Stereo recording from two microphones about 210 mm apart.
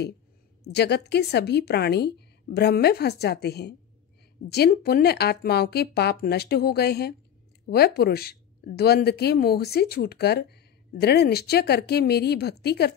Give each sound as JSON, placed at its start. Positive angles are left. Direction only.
{"t": 0.7, "sound": "speech", "side_deg": 50}